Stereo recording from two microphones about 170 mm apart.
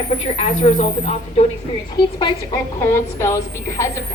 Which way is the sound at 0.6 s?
40° left (ahead or behind).